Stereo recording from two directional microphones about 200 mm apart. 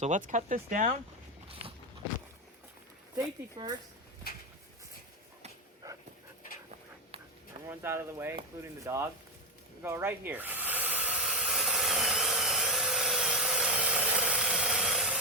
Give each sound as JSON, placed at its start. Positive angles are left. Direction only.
{"t": 0.0, "sound": "speech", "side_deg": -40}
{"t": 3.2, "sound": "speech", "side_deg": -20}
{"t": 5.8, "sound": "dog", "side_deg": -15}
{"t": 7.7, "sound": "speech", "side_deg": -10}
{"t": 9.8, "sound": "hiss", "side_deg": -10}